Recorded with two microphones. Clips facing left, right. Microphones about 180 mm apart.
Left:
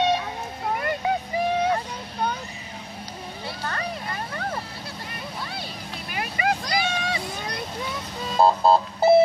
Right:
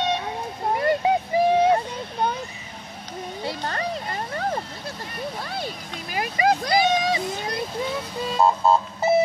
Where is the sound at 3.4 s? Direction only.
30° right (ahead or behind).